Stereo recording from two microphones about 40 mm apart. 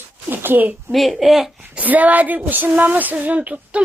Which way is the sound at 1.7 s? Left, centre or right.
Right.